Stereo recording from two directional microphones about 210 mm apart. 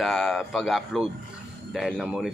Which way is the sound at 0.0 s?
Centre (ahead or behind).